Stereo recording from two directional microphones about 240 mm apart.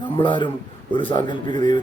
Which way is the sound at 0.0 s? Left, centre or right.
Centre.